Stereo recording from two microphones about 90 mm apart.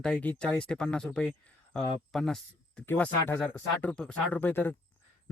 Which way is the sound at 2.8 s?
25° left (ahead or behind).